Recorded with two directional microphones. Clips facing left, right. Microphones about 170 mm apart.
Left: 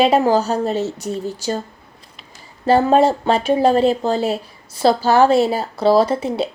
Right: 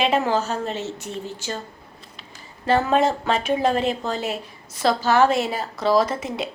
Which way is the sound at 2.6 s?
35° left (ahead or behind).